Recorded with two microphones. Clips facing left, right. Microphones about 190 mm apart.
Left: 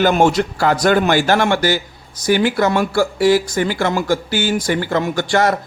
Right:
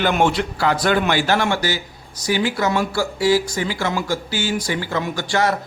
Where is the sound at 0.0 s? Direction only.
40° left (ahead or behind).